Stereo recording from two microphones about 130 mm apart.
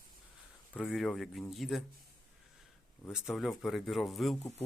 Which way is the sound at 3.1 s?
Centre (ahead or behind).